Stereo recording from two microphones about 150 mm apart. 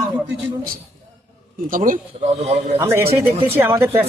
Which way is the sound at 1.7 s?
65° right (ahead or behind).